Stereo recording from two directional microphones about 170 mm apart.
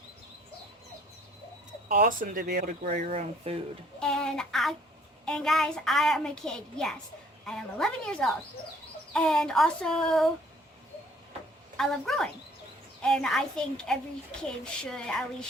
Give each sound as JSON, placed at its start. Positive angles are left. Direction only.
{"t": 1.9, "sound": "speech", "side_deg": -55}
{"t": 3.1, "sound": "speech", "side_deg": -35}
{"t": 4.0, "sound": "a woman's voice", "side_deg": 5}
{"t": 11.8, "sound": "a woman's voice", "side_deg": 5}